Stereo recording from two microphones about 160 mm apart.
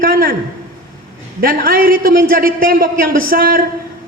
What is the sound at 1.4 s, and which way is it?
A man's voice, 65° right (ahead or behind).